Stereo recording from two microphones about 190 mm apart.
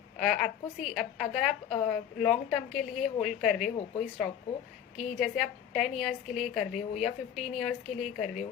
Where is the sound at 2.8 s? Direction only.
40° left (ahead or behind).